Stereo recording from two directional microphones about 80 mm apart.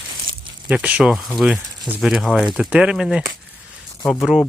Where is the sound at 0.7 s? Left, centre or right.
Centre.